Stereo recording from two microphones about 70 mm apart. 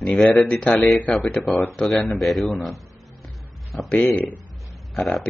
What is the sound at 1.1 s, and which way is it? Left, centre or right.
Speech, centre.